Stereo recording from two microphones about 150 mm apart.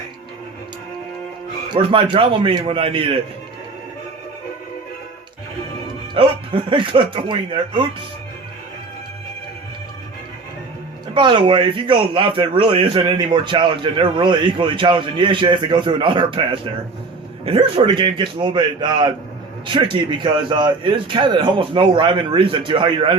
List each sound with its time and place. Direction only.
1.7 s speech: 35° right (ahead or behind)
6.1 s speech: 35° right (ahead or behind)
11.1 s speech: 30° right (ahead or behind)